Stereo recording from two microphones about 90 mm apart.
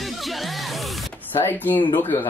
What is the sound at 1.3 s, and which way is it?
Speech, 20° left (ahead or behind).